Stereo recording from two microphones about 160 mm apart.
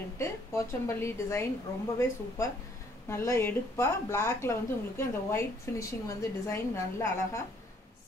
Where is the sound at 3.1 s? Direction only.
15° left (ahead or behind).